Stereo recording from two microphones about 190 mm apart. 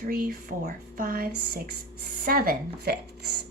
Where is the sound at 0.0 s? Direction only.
45° right (ahead or behind).